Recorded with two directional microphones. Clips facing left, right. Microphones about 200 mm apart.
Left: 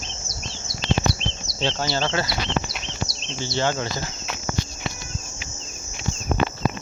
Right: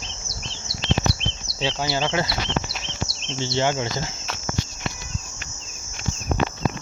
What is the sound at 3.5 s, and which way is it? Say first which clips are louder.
Speech: right 1 dB; 20° right (ahead or behind).